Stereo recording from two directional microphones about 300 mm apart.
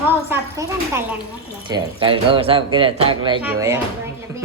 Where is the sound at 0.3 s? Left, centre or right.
Centre.